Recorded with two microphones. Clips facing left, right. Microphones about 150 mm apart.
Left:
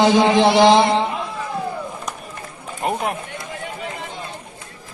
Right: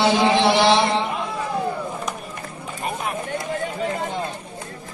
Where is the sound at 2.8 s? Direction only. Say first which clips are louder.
Left 6 dB; 80° left.